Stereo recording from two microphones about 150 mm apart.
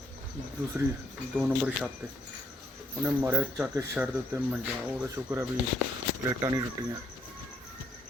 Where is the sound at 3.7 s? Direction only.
20° right (ahead or behind).